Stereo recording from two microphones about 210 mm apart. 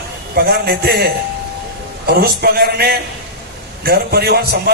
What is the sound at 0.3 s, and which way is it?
A man's voice, 50° right (ahead or behind).